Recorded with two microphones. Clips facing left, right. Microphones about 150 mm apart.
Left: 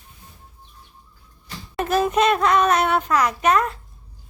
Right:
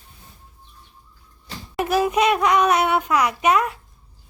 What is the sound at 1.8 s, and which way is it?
Speech, 10° right (ahead or behind).